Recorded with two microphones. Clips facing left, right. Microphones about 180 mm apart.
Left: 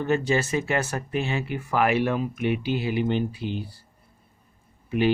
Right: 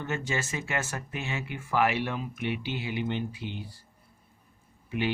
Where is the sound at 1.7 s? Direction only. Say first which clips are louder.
Left 5 dB; 50° left (ahead or behind).